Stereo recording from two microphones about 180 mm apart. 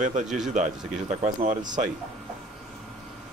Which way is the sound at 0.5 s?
40° right (ahead or behind).